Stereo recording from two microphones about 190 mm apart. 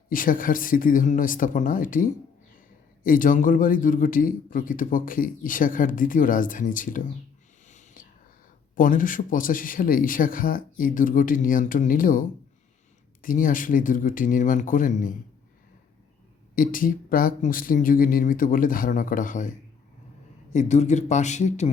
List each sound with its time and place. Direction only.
0.1 s a man's voice: 45° left (ahead or behind)
7.7 s whispering: 40° left (ahead or behind)
8.7 s a man's voice: 45° left (ahead or behind)
13.2 s a man's voice: 45° left (ahead or behind)
16.6 s a man's voice: 45° left (ahead or behind)